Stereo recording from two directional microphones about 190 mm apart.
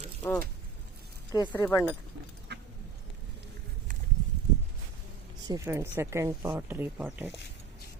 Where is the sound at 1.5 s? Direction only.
10° left (ahead or behind).